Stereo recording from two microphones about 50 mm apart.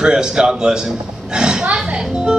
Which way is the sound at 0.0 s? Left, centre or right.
Centre.